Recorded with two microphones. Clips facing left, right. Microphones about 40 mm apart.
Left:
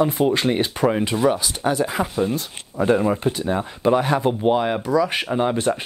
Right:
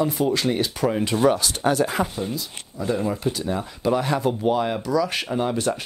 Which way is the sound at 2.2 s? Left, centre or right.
Left.